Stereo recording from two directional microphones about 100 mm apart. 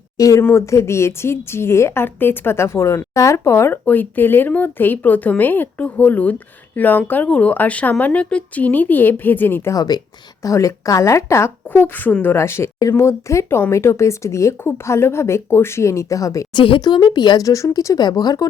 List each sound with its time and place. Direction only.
0.2 s a woman's voice: 35° left (ahead or behind)
9.7 s speech: 45° left (ahead or behind)
10.4 s a woman's voice: 30° left (ahead or behind)
16.6 s speech: 60° left (ahead or behind)
16.8 s a woman's voice: 45° left (ahead or behind)